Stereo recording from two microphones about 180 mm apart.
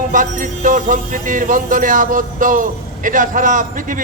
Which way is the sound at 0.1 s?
45° right (ahead or behind).